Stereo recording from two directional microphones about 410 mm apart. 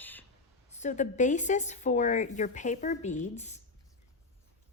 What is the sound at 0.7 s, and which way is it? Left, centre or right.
Speech, centre.